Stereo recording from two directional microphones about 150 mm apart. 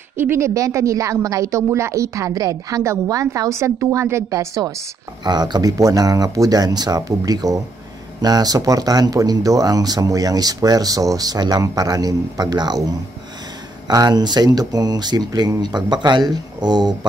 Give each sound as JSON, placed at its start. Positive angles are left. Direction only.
{"t": 0.2, "sound": "speech", "side_deg": -20}